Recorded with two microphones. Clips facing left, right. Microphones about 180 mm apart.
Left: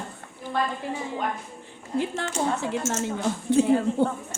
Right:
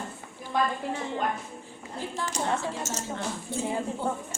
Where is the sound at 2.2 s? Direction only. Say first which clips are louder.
Left 2 dB; 70° left (ahead or behind).